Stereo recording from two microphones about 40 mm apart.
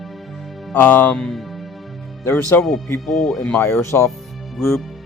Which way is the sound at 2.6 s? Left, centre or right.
Centre.